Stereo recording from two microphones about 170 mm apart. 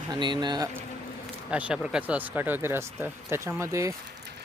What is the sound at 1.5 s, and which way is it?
Speech, 5° right (ahead or behind).